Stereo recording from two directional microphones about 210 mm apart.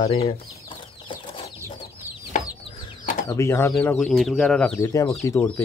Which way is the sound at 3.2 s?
15° left (ahead or behind).